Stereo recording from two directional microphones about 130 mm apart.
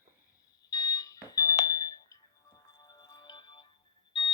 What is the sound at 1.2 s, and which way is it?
Music, 30° left (ahead or behind).